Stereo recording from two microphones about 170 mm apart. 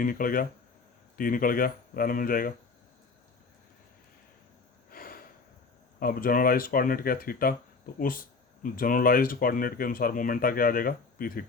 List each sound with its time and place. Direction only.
0.0 s speech: 55° left (ahead or behind)
4.9 s a sound: 60° left (ahead or behind)
6.0 s speech: 55° left (ahead or behind)